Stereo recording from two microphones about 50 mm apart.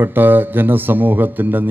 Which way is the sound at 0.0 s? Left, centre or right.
Right.